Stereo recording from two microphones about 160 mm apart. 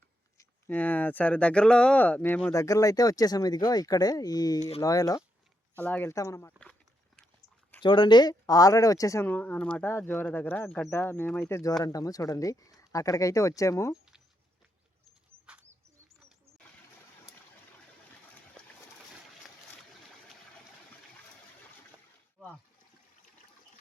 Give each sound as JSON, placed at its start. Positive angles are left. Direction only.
{"t": 0.3, "sound": "speech", "side_deg": 10}
{"t": 7.8, "sound": "speech", "side_deg": 30}